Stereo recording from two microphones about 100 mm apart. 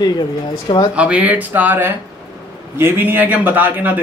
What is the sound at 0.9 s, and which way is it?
A man's voice, 10° right (ahead or behind).